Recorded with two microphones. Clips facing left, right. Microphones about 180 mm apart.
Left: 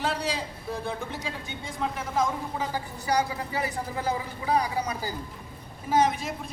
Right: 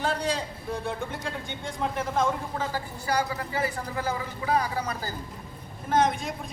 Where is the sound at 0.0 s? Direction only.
5° left (ahead or behind).